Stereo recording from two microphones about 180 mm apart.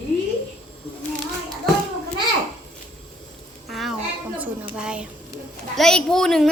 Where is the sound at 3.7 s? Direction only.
Centre (ahead or behind).